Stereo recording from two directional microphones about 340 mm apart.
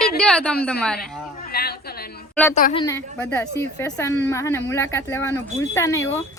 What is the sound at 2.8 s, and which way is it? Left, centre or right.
Speech, centre.